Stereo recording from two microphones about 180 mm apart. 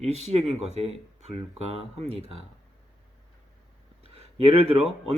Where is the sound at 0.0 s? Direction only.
35° right (ahead or behind).